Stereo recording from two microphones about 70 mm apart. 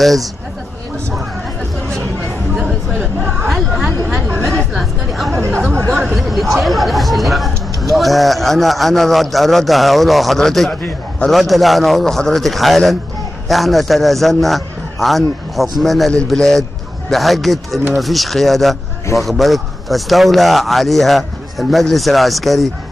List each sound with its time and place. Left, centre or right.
0.0 s speech: centre
2.5 s a sound: centre
3.4 s chatter: centre
6.0 s speech: centre
10.7 s a man's voice: centre
11.2 s a man's voice: centre